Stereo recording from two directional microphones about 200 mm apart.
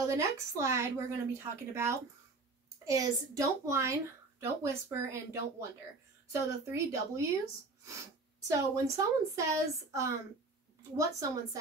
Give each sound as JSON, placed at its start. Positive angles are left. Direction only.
{"t": 0.0, "sound": "speech", "side_deg": -15}
{"t": 6.7, "sound": "speech", "side_deg": -15}
{"t": 8.5, "sound": "speech", "side_deg": -15}